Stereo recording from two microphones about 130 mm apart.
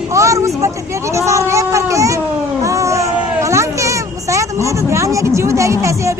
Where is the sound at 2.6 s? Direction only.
25° right (ahead or behind).